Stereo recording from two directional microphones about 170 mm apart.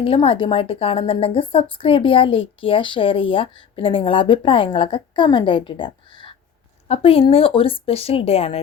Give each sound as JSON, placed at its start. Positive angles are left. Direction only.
{"t": 0.0, "sound": "a woman's voice", "side_deg": 35}